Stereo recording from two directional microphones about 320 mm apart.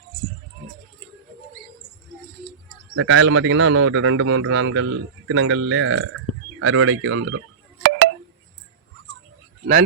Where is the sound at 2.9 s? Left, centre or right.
Right.